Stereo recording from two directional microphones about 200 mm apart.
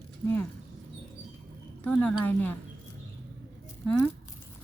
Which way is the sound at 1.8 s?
5° left (ahead or behind).